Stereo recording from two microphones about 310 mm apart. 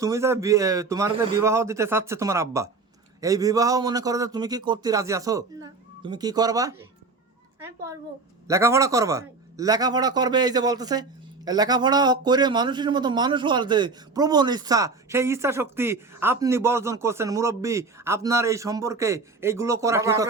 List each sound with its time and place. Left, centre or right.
0.0 s a man's voice: centre
8.4 s a man's voice: centre